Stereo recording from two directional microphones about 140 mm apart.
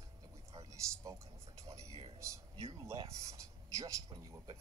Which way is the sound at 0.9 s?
25° right (ahead or behind).